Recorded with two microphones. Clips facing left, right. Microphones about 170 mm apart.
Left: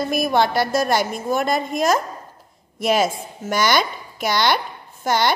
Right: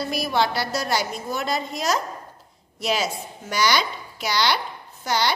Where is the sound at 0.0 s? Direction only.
50° left (ahead or behind).